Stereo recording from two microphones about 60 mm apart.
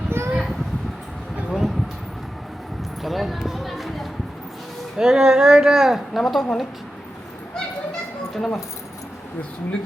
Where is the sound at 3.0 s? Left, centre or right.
Centre.